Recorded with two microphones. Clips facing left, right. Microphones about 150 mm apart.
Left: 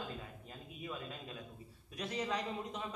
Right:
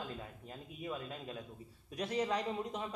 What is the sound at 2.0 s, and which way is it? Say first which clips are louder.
Speech: right 3 dB; 45° right (ahead or behind).